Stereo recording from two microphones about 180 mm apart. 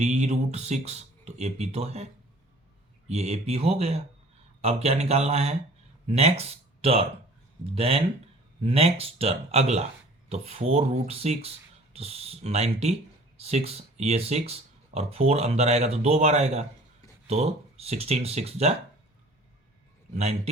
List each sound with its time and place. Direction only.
0.0 s speech: 40° right (ahead or behind)
3.1 s speech: 35° right (ahead or behind)
20.1 s speech: 35° right (ahead or behind)